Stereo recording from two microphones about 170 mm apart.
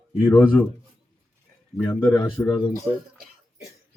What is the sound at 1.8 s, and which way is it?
Speech, 15° left (ahead or behind).